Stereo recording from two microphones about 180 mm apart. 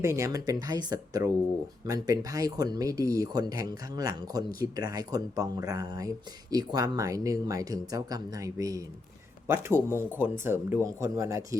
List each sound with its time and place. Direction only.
0.0 s speech: 15° right (ahead or behind)